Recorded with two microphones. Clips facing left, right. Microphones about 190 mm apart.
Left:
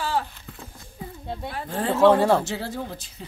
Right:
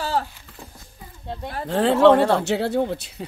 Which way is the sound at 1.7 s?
75° right (ahead or behind).